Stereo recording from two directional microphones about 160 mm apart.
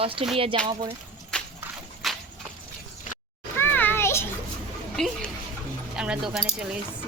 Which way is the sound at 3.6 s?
10° left (ahead or behind).